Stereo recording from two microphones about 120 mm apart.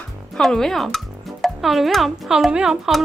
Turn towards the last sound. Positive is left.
turn(degrees=-5)  # may be behind; listen again after turning